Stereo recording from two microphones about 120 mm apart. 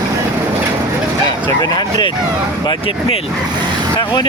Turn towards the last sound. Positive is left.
turn(degrees=40)  # may be behind; listen again after turning